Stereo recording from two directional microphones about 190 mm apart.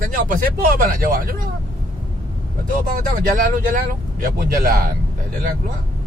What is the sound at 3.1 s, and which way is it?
A man's voice, 45° right (ahead or behind).